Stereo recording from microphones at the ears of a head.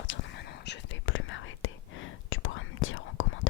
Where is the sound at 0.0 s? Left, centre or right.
Left.